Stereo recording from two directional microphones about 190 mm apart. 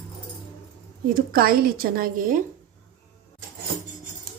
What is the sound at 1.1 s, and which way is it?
A woman's voice, 50° right (ahead or behind).